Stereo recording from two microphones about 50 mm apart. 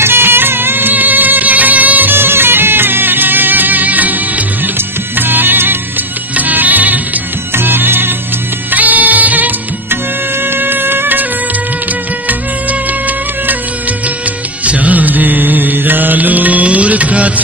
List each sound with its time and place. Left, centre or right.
0.0 s music: right
8.7 s music: right
10.4 s bagpipes: right
14.6 s mantra: right